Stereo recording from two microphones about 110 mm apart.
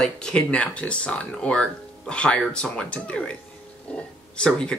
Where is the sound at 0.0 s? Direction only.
5° left (ahead or behind).